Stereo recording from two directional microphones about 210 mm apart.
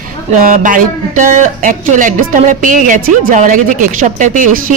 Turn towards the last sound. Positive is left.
turn(degrees=-35)  # may be behind; listen again after turning